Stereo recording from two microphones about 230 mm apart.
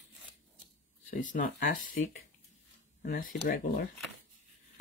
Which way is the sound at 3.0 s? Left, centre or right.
Left.